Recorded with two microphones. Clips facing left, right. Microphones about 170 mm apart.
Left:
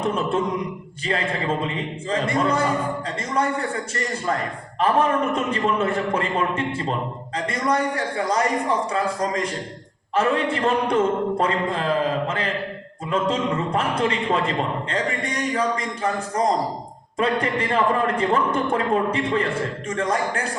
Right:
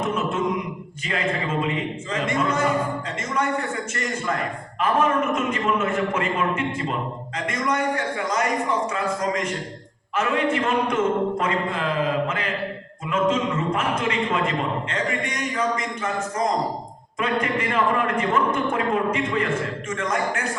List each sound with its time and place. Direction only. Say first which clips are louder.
0.0 s a man's voice: left 1 dB; 35° left (ahead or behind)
3.9 s a man's voice: left 1 dB; 35° left (ahead or behind)
13.1 s a man's voice: even; 35° left (ahead or behind)